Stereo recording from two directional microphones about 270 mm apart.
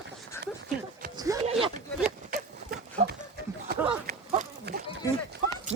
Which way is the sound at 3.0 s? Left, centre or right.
Right.